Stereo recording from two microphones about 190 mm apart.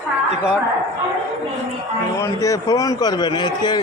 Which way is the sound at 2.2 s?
15° left (ahead or behind).